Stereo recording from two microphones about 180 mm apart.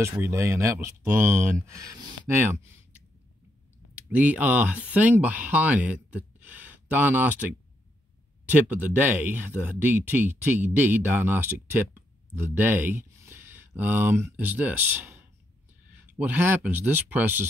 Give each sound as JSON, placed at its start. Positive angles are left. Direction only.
{"t": 0.0, "sound": "speech", "side_deg": -15}
{"t": 4.1, "sound": "speech", "side_deg": -10}
{"t": 8.5, "sound": "speech", "side_deg": -10}